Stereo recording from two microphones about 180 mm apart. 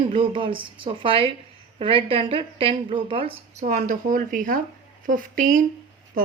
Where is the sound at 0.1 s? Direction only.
30° right (ahead or behind).